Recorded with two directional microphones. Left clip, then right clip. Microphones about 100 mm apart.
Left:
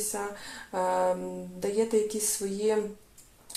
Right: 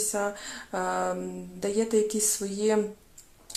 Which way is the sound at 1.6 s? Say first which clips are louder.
Right 1 dB; 30° right (ahead or behind).